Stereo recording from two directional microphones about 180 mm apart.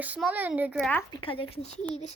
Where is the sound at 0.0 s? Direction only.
10° right (ahead or behind).